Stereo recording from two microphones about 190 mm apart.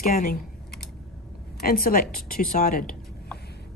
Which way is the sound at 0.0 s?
50° left (ahead or behind).